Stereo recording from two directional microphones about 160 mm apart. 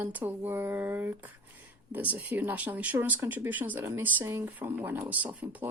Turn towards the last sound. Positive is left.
turn(degrees=-10)  # may be behind; listen again after turning